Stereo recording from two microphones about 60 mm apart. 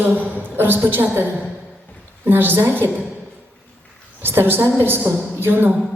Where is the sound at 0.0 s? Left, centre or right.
Right.